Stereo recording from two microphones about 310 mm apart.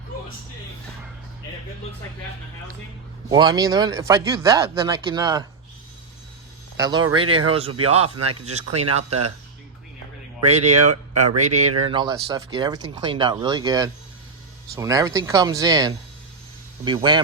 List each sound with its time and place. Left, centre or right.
3.2 s speech: centre
6.7 s speech: centre
9.0 s speech: right
10.4 s speech: right